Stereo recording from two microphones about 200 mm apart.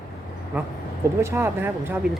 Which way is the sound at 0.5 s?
10° right (ahead or behind).